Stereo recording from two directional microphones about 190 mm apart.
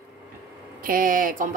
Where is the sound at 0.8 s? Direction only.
45° right (ahead or behind).